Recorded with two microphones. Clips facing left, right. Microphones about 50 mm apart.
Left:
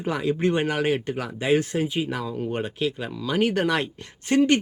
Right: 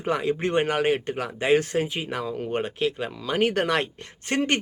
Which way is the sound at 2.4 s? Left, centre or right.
Right.